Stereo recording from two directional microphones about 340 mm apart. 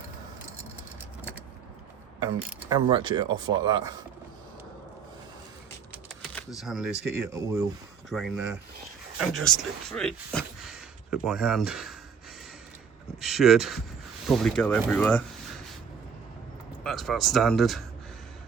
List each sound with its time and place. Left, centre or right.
2.1 s speech: centre
5.9 s speech: centre
13.2 s speech: centre
16.8 s speech: centre